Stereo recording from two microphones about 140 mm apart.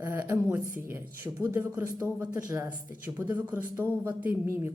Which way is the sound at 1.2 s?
20° right (ahead or behind).